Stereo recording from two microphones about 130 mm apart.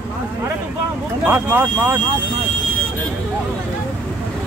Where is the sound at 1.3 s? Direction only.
20° right (ahead or behind).